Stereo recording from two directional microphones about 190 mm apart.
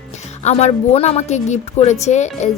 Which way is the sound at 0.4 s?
35° left (ahead or behind).